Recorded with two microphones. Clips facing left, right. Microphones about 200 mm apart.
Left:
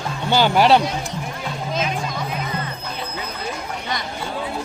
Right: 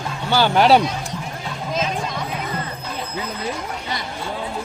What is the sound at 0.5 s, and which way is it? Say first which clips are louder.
Speech: right 1 dB; centre (ahead or behind).